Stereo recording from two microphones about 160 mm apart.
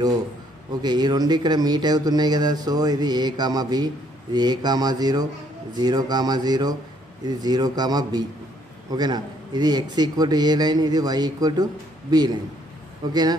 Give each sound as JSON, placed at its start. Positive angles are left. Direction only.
{"t": 0.8, "sound": "speech", "side_deg": -25}